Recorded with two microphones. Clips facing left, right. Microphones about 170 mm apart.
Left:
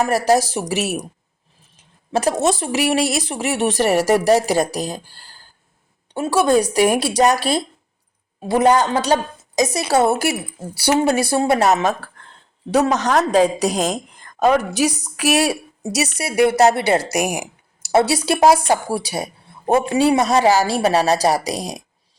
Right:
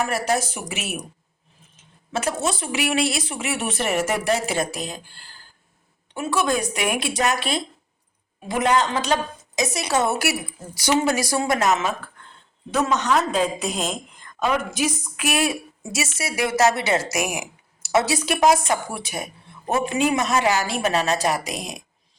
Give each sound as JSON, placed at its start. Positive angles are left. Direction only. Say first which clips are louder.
{"t": 0.0, "sound": "speech", "louder": "left 7 dB", "side_deg": 35}
{"t": 2.1, "sound": "speech", "louder": "left 7 dB", "side_deg": 40}
{"t": 6.1, "sound": "speech", "louder": "left 7 dB", "side_deg": 35}